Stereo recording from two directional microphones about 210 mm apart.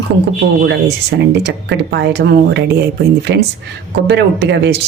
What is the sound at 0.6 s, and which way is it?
Speech, 55° right (ahead or behind).